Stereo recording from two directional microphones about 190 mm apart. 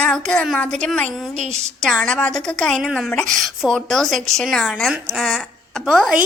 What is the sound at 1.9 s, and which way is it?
A woman's voice, 5° left (ahead or behind).